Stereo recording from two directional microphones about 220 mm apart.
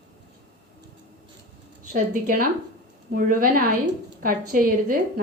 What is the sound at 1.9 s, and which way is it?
Speech, 40° right (ahead or behind).